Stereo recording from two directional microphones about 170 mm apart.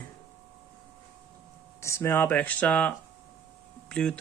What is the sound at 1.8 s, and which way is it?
Speech, 15° left (ahead or behind).